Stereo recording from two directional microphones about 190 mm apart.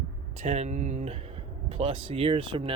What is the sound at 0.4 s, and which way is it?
Speech, 35° right (ahead or behind).